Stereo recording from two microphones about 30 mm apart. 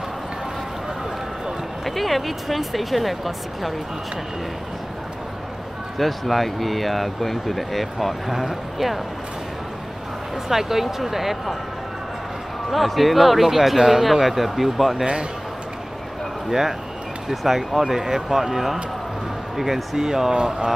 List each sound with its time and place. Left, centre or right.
1.9 s speech: centre
5.9 s speech: centre
10.5 s speech: centre
12.7 s speech: centre
16.4 s speech: centre
20.0 s speech: centre